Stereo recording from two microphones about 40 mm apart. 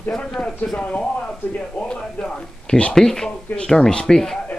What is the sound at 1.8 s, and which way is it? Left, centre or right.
Speech, centre.